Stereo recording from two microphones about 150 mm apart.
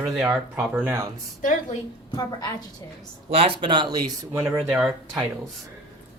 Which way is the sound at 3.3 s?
40° right (ahead or behind).